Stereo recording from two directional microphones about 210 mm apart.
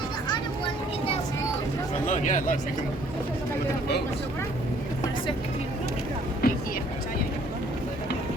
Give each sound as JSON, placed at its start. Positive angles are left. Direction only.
{"t": 2.0, "sound": "speech", "side_deg": 35}
{"t": 6.4, "sound": "vehicle", "side_deg": 45}